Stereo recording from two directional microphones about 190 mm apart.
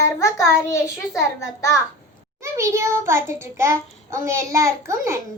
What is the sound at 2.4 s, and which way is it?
Child singing, 15° right (ahead or behind).